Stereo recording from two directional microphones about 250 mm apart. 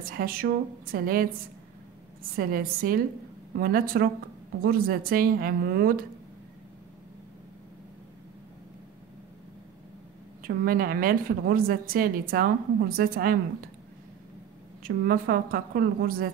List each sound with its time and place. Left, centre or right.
0.0 s a woman's voice: right
2.3 s a woman's voice: right
10.4 s a woman's voice: right
14.8 s a woman's voice: right